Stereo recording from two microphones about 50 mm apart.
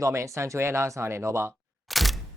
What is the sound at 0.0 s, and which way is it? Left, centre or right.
Speech, right.